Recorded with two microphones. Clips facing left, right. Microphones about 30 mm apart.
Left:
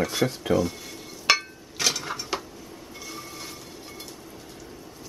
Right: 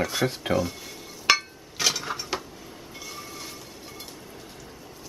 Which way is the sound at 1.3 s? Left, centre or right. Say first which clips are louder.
Even; centre.